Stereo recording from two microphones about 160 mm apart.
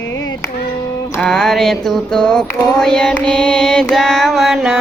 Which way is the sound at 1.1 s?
5° left (ahead or behind).